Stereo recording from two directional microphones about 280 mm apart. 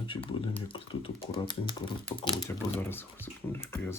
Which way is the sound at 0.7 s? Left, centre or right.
Centre.